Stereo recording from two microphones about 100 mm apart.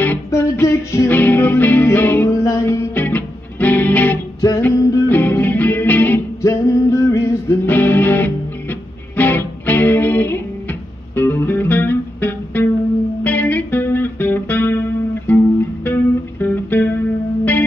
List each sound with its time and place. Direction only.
0.3 s music: 30° left (ahead or behind)
2.9 s music: 15° left (ahead or behind)
6.4 s music: 30° left (ahead or behind)
7.6 s music: 20° left (ahead or behind)